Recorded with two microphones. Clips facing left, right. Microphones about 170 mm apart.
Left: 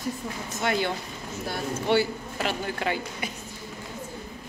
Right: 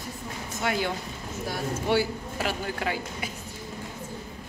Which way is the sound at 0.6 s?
5° right (ahead or behind).